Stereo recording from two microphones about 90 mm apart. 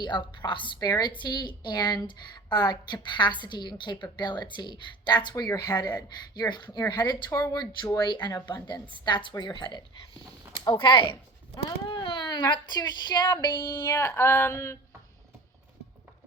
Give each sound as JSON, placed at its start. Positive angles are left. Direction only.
{"t": 0.0, "sound": "a woman's voice", "side_deg": 60}
{"t": 0.8, "sound": "a woman's voice", "side_deg": 50}
{"t": 10.6, "sound": "speech", "side_deg": 65}
{"t": 11.5, "sound": "speech", "side_deg": 60}
{"t": 13.9, "sound": "a sound", "side_deg": 25}